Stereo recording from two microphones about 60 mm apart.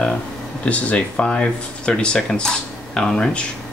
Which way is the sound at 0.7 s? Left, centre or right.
Centre.